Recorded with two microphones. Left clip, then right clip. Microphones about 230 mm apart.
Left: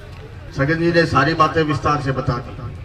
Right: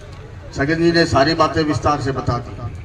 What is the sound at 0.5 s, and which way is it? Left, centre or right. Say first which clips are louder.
A man's voice: right 1 dB; right.